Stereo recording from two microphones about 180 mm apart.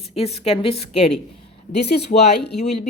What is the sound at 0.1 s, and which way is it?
Speech, 35° left (ahead or behind).